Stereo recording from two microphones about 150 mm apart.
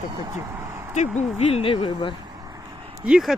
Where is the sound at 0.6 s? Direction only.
20° right (ahead or behind).